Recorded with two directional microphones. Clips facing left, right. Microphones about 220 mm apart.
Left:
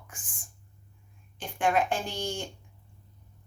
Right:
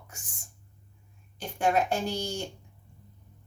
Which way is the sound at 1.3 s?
40° right (ahead or behind).